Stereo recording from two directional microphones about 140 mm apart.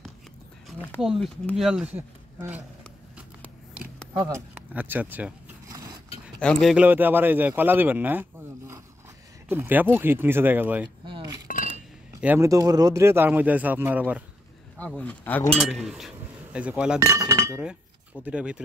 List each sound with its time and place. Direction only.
1.0 s a man's voice: centre (ahead or behind)
4.7 s a man's voice: 10° right (ahead or behind)
5.7 s scrape: 25° right (ahead or behind)
6.4 s a man's voice: centre (ahead or behind)
11.1 s chink: 35° right (ahead or behind)
11.4 s chink: 75° left (ahead or behind)
12.4 s a man's voice: 25° right (ahead or behind)
15.0 s a man's voice: 10° left (ahead or behind); by 17.0 s 5° right (ahead or behind)
17.0 s chink: 20° right (ahead or behind)
18.2 s a man's voice: 10° right (ahead or behind)